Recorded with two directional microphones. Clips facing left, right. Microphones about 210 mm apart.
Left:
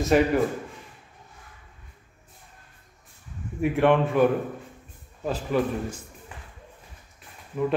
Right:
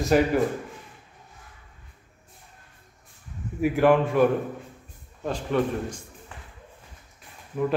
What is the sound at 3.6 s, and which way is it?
A man's voice, centre (ahead or behind).